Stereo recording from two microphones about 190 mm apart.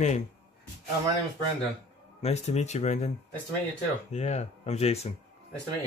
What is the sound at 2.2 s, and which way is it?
Speech, 35° left (ahead or behind).